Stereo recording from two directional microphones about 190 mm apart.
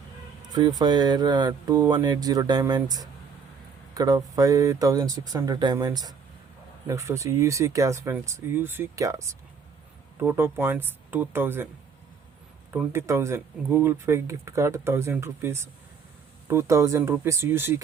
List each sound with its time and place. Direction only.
0.5 s speech: 20° right (ahead or behind)
12.7 s speech: 10° right (ahead or behind)